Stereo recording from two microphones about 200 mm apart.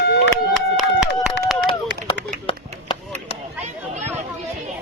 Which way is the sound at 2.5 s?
25° left (ahead or behind).